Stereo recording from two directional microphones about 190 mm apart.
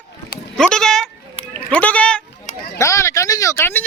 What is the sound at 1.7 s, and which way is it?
Sheep, 5° left (ahead or behind).